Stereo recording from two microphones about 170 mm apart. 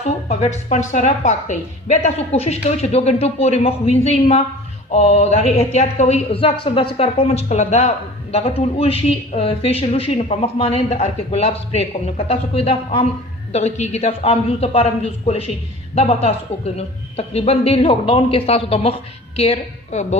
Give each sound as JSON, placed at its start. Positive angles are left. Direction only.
{"t": 0.0, "sound": "speech", "side_deg": 40}